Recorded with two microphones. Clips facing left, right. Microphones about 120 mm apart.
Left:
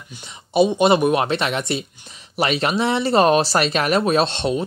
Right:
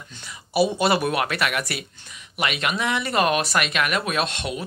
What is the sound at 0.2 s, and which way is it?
Speech, 25° left (ahead or behind).